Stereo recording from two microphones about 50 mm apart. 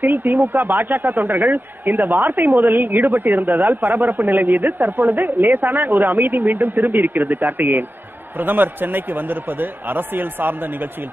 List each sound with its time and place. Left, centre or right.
0.0 s a man's voice: right